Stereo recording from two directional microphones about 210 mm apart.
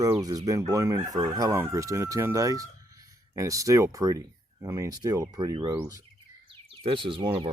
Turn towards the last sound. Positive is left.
turn(degrees=-25)  # may be behind; listen again after turning